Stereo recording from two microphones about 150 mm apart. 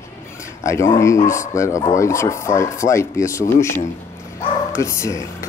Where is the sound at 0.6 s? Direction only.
20° left (ahead or behind).